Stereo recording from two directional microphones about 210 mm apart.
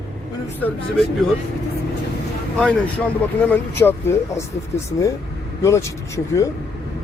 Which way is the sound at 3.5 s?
10° left (ahead or behind).